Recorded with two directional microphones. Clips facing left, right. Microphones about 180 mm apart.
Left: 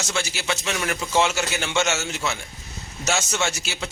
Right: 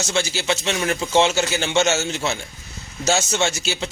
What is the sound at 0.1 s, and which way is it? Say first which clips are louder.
Speech: right 5 dB; 30° right (ahead or behind).